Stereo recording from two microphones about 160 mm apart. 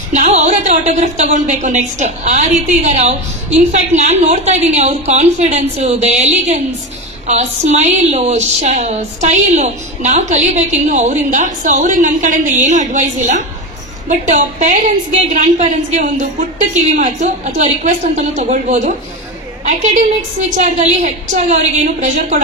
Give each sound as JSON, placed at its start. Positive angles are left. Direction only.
{"t": 0.1, "sound": "a woman's voice", "side_deg": -45}